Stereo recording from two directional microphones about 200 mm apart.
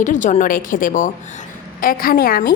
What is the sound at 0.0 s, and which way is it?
A woman's voice, 40° left (ahead or behind).